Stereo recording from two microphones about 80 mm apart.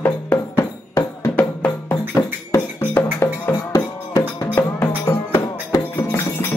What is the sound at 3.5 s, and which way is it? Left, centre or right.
Music, left.